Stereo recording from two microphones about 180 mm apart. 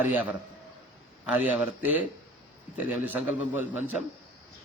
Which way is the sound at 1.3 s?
10° right (ahead or behind).